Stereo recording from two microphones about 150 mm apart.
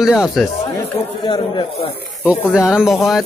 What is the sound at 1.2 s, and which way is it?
Speech, 35° left (ahead or behind).